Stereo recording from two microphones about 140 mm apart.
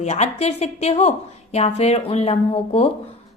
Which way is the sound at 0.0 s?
55° left (ahead or behind).